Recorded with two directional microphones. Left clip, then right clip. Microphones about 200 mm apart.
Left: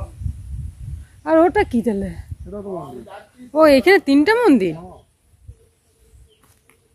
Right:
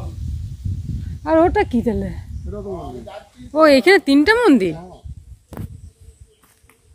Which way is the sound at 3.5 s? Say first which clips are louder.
Even; 5° left (ahead or behind).